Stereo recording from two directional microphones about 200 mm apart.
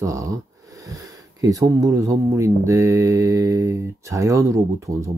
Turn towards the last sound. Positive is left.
turn(degrees=-15)  # may be behind; listen again after turning